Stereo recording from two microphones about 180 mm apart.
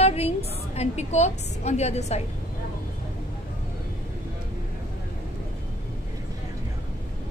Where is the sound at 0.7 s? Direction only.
40° left (ahead or behind).